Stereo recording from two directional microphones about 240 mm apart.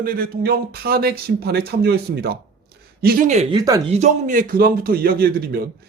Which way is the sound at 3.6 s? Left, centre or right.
Centre.